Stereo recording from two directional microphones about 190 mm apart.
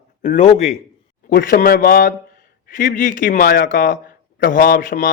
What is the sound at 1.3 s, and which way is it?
Speech, 45° left (ahead or behind).